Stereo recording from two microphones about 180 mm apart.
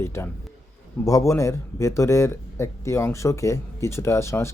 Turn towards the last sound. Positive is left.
turn(degrees=15)  # may be behind; listen again after turning